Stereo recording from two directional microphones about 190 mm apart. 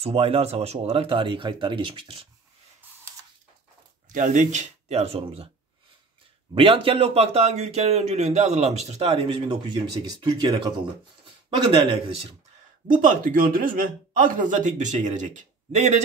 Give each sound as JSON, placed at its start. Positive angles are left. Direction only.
{"t": 0.0, "sound": "speech", "side_deg": -30}
{"t": 4.1, "sound": "speech", "side_deg": -40}
{"t": 6.5, "sound": "speech", "side_deg": -30}
{"t": 12.8, "sound": "a man's voice", "side_deg": -45}